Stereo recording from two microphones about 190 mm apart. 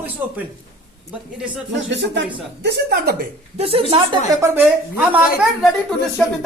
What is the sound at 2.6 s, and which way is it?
Speech, 60° right (ahead or behind).